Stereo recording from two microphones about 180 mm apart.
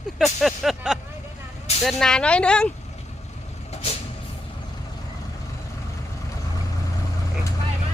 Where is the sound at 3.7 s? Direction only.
35° left (ahead or behind).